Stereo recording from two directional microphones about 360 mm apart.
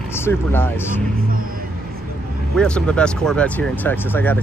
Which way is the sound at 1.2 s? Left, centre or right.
Right.